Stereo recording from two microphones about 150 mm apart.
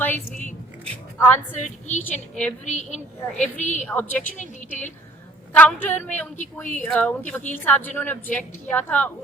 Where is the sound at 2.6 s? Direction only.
55° left (ahead or behind).